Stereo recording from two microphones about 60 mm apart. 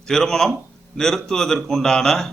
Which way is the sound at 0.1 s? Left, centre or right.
Centre.